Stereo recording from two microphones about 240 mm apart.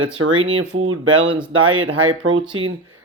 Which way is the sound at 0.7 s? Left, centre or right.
Right.